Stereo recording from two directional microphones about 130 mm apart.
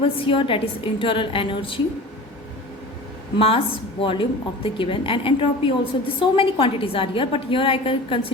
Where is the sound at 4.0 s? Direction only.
45° left (ahead or behind).